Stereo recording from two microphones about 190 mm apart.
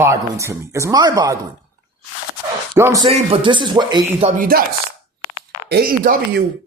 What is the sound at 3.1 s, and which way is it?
Speech, 30° right (ahead or behind).